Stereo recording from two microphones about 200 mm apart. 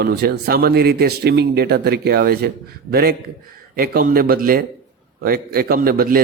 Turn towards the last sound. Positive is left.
turn(degrees=-50)  # may be behind; listen again after turning